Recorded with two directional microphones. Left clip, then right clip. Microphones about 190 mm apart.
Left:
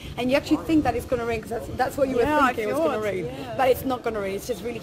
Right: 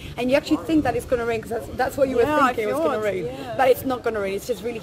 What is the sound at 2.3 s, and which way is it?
Speech, 20° left (ahead or behind).